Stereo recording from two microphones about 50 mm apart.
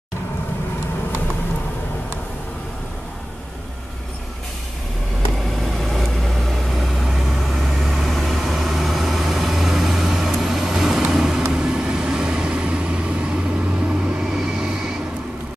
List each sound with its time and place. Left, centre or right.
5.6 s vehicle: centre